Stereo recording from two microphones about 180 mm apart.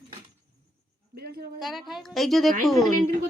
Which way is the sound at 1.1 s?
60° right (ahead or behind).